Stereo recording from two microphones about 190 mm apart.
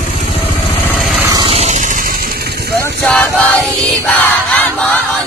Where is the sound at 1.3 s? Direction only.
25° right (ahead or behind); by 2.8 s 55° right (ahead or behind).